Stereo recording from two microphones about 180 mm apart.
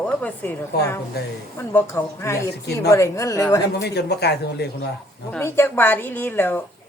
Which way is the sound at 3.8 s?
65° left (ahead or behind).